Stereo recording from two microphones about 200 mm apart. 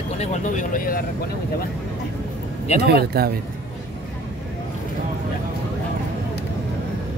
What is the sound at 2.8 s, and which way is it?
Speech, 50° right (ahead or behind).